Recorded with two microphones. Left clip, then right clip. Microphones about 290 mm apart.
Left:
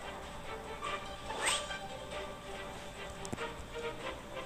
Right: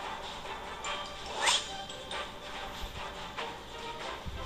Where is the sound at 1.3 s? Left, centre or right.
Centre.